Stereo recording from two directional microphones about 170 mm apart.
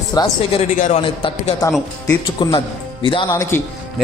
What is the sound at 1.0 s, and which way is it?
A man's voice, 30° left (ahead or behind).